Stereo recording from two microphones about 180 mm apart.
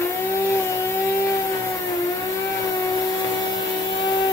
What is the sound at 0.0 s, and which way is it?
Vehicle, 15° left (ahead or behind).